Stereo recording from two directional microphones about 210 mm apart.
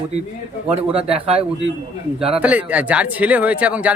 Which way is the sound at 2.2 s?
5° right (ahead or behind).